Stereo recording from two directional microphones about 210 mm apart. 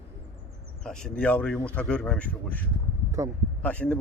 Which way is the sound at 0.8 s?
5° left (ahead or behind).